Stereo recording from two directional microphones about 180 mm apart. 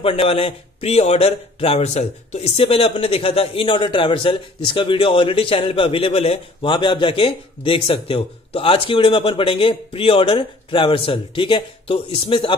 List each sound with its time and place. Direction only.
0.0 s a man's voice: 30° left (ahead or behind)